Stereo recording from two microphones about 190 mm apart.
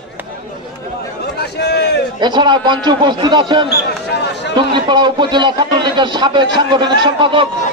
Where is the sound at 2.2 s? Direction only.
25° right (ahead or behind).